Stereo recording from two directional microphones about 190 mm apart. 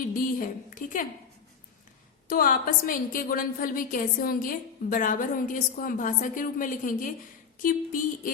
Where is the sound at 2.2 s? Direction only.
45° left (ahead or behind).